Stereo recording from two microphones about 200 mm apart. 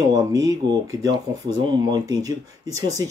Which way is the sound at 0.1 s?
20° right (ahead or behind).